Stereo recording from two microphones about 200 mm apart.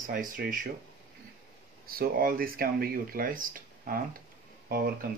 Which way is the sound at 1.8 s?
45° right (ahead or behind).